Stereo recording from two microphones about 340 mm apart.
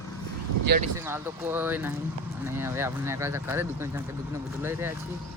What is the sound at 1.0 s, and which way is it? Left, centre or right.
Speech, centre.